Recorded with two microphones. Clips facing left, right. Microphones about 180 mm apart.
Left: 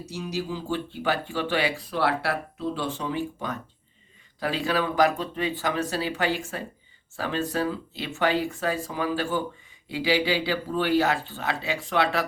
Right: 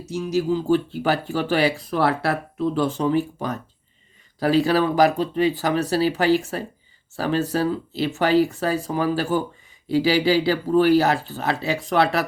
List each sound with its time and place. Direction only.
0.1 s speech: 45° right (ahead or behind)